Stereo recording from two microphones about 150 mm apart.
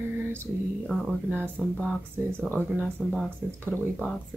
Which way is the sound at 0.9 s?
5° left (ahead or behind).